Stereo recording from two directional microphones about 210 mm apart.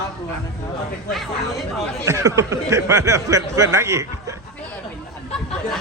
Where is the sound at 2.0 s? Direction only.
15° right (ahead or behind).